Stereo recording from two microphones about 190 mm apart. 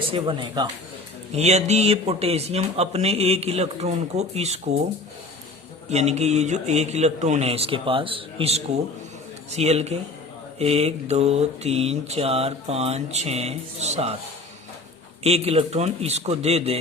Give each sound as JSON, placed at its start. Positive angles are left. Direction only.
{"t": 0.1, "sound": "speech", "side_deg": -25}
{"t": 1.4, "sound": "mantra", "side_deg": -35}
{"t": 5.9, "sound": "mantra", "side_deg": -35}
{"t": 15.2, "sound": "mantra", "side_deg": -35}